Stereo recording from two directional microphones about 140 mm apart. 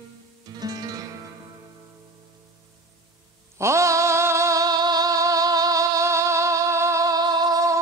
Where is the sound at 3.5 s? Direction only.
20° right (ahead or behind).